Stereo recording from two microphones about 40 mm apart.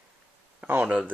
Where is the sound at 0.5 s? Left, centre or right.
Right.